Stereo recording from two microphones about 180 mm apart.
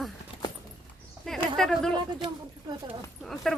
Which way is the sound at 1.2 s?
5° left (ahead or behind).